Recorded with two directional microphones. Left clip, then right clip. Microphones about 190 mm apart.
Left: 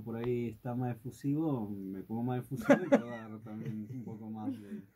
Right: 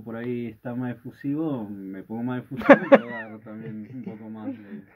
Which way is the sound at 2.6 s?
40° right (ahead or behind).